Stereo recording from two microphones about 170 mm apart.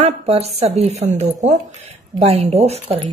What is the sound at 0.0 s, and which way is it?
A woman's voice, 40° right (ahead or behind).